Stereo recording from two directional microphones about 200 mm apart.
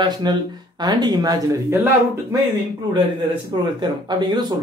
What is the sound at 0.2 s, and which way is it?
Speech, 20° right (ahead or behind).